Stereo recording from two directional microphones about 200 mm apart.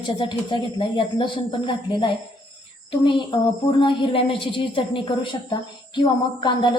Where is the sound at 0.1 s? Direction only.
20° left (ahead or behind).